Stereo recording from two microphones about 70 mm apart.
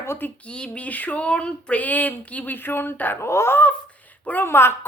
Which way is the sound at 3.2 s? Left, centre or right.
Left.